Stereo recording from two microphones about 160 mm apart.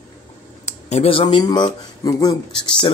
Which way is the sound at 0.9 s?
35° left (ahead or behind).